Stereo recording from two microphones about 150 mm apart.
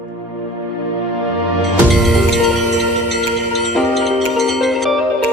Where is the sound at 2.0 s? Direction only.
Centre (ahead or behind).